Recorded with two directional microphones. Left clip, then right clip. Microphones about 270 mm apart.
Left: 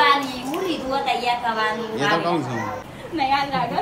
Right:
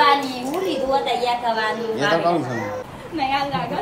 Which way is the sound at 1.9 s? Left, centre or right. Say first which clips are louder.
Right 3 dB; centre.